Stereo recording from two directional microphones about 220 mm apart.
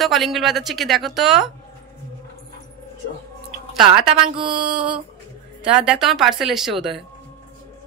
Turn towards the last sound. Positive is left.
turn(degrees=0)  # may be behind; listen again after turning